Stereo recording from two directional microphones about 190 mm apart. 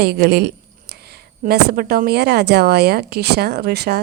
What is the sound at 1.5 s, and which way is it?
A woman's voice, 50° right (ahead or behind).